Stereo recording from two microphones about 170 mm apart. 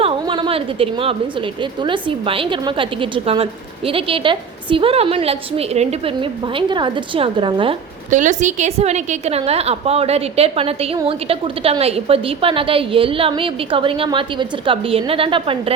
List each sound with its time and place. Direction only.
0.0 s a sound: 30° right (ahead or behind)
1.8 s a woman's voice: 30° right (ahead or behind)
6.1 s a woman's voice: 30° right (ahead or behind)
8.1 s a woman's voice: 45° right (ahead or behind); by 15.7 s 30° right (ahead or behind)